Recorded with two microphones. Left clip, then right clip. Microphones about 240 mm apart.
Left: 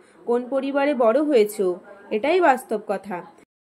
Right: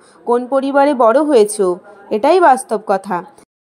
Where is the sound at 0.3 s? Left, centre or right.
Right.